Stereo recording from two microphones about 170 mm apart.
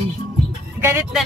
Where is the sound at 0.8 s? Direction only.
10° right (ahead or behind).